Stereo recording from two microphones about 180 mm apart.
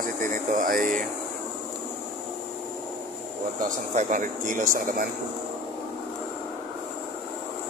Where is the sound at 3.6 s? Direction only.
45° right (ahead or behind).